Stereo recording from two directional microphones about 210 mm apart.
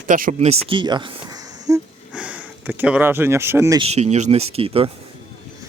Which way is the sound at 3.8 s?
30° right (ahead or behind).